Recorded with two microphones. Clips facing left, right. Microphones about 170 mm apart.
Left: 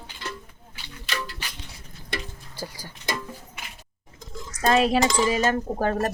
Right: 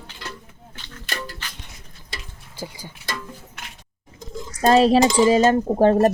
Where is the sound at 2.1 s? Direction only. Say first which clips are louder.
Left 6 dB; 60° left (ahead or behind).